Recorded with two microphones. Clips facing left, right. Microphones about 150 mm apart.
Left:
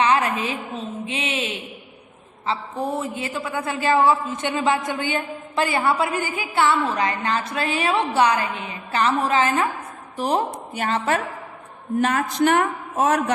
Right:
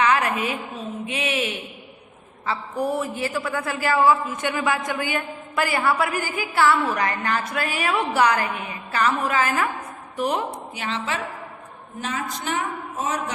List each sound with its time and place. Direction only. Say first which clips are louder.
0.0 s a woman's voice: left 1 dB; 25° left (ahead or behind)
10.8 s a woman's voice: left 7 dB; 50° left (ahead or behind)
12.0 s a man's voice: left 8 dB; 60° left (ahead or behind)